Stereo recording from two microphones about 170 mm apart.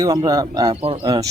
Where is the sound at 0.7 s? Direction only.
35° right (ahead or behind).